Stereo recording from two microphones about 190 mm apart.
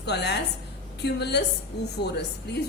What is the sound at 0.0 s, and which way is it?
A woman's voice, 60° left (ahead or behind).